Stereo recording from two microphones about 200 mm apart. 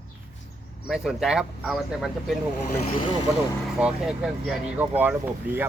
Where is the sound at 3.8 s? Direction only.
5° right (ahead or behind).